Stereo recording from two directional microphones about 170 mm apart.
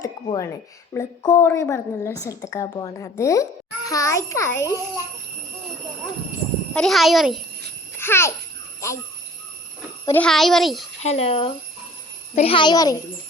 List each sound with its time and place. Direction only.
0.0 s a woman's voice: 20° left (ahead or behind)
6.7 s a child's voice: centre (ahead or behind)
7.9 s a child's voice: 15° left (ahead or behind)
10.1 s a child's voice: 5° left (ahead or behind)
11.0 s a woman's voice: 40° left (ahead or behind); by 13.0 s 20° left (ahead or behind)